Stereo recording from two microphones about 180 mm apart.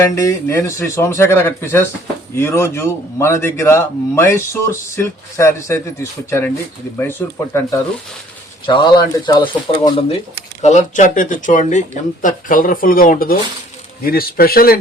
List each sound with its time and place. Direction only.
0.0 s a man's voice: 15° left (ahead or behind)
8.6 s speech: 25° left (ahead or behind)
10.6 s speech: 40° left (ahead or behind)